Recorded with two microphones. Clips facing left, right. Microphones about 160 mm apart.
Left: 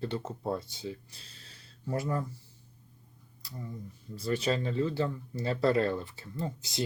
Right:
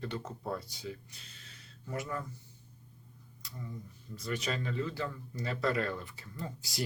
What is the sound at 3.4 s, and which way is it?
Tick-tock, 30° left (ahead or behind).